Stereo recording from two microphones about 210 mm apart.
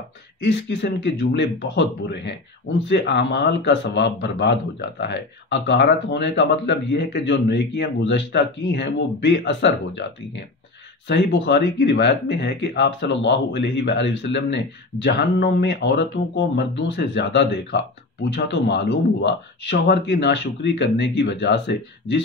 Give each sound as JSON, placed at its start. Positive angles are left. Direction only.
{"t": 0.4, "sound": "a man's voice", "side_deg": 55}